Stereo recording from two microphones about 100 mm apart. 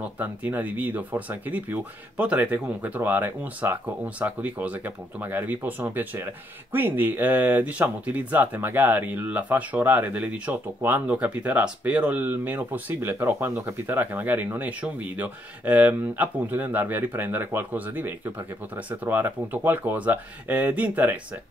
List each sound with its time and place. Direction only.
0.2 s speech: 15° right (ahead or behind)